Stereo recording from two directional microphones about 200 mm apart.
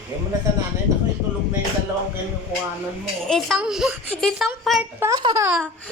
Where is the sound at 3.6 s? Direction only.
5° right (ahead or behind).